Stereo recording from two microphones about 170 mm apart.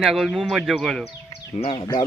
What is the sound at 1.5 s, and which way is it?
Speech, 30° left (ahead or behind).